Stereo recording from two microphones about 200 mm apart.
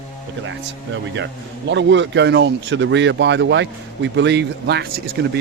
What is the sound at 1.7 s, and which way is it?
Speech, 65° right (ahead or behind).